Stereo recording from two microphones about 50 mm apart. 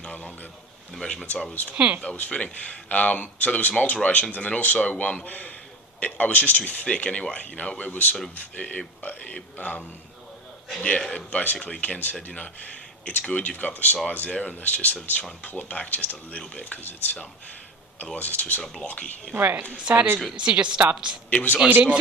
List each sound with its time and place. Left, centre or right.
0.0 s a man's voice: left
1.0 s speech: centre
1.7 s a woman's voice: right
2.0 s speech: left
13.1 s speech: left
18.6 s speech: centre
18.9 s speech: left
19.3 s a woman's voice: right
19.9 s a woman's voice: right
21.2 s speech: left
21.7 s a woman's voice: right